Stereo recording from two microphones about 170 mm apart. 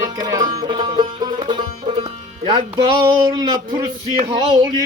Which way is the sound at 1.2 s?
30° right (ahead or behind).